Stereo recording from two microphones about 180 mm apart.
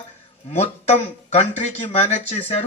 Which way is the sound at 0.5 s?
35° left (ahead or behind).